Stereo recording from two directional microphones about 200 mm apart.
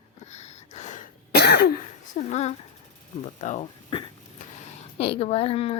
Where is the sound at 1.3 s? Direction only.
55° left (ahead or behind).